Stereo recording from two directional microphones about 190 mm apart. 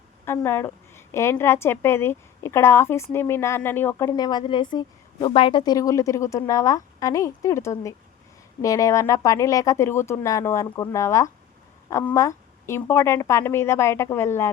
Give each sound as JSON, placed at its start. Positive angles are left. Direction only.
{"t": 0.3, "sound": "a woman's voice", "side_deg": 10}